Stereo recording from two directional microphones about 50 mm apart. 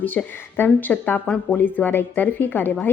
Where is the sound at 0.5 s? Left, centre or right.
Left.